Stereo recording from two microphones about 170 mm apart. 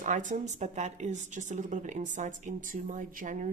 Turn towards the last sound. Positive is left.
turn(degrees=-50)  # may be behind; listen again after turning